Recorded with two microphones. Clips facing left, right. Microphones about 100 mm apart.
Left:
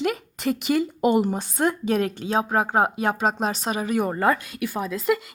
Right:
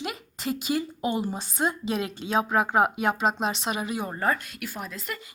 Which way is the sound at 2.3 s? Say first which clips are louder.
Even; 35° left (ahead or behind).